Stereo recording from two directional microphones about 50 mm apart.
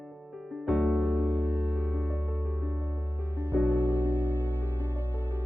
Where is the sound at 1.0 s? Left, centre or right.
Right.